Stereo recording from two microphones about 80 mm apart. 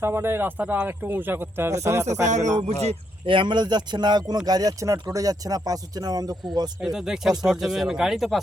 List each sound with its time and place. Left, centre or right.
0.0 s speech: right
3.2 s a man's voice: right
4.4 s speech: right
6.8 s speech: centre